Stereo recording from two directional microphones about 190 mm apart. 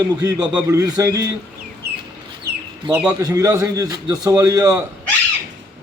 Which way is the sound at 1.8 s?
55° right (ahead or behind).